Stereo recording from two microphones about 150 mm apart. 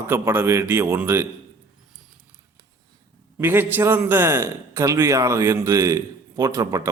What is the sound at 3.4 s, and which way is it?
A man's voice, 15° right (ahead or behind).